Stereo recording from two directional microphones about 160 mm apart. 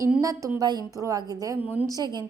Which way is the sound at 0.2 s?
20° right (ahead or behind).